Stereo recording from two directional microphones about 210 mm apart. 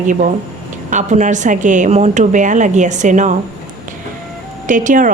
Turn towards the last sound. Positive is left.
turn(degrees=-40)  # may be behind; listen again after turning